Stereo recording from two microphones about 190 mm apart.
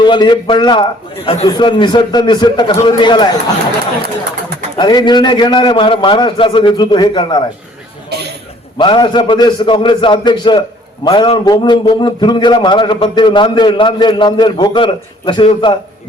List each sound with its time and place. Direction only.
0.0 s a man's voice: 25° left (ahead or behind)
4.8 s a man's voice: 25° left (ahead or behind)
8.1 s a sound: 60° right (ahead or behind)
8.8 s a man's voice: 25° left (ahead or behind)